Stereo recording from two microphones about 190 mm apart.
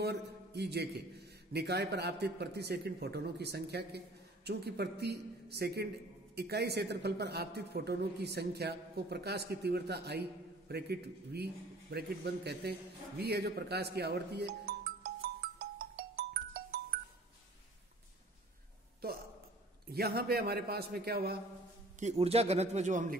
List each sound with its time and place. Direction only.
0.0 s a man's voice: 60° right (ahead or behind)
13.2 s music: 60° right (ahead or behind)
19.9 s a man's voice: 55° right (ahead or behind)
22.2 s speech: 30° right (ahead or behind)